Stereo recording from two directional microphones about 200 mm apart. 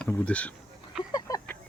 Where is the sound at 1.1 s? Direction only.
15° left (ahead or behind).